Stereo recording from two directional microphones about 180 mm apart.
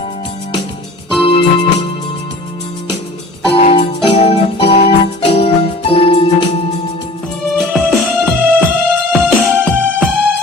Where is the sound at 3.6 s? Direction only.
35° left (ahead or behind).